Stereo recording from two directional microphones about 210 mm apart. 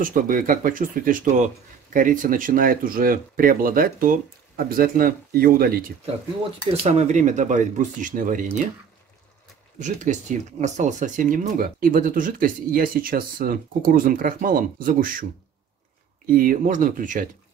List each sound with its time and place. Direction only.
0.0 s speech: 40° right (ahead or behind)
6.7 s speech: 30° right (ahead or behind)
9.8 s speech: 35° right (ahead or behind)
16.3 s speech: 45° right (ahead or behind)